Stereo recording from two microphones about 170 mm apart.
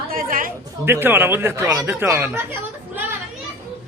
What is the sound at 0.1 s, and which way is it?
Chatter, 55° right (ahead or behind).